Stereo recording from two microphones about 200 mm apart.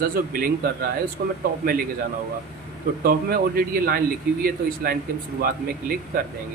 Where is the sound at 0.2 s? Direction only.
45° right (ahead or behind).